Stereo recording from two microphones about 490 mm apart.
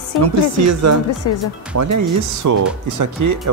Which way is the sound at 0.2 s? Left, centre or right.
Right.